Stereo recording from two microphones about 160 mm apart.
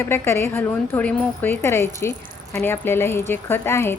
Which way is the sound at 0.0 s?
15° left (ahead or behind).